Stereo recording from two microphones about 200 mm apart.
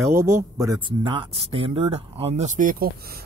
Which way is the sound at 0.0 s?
15° right (ahead or behind).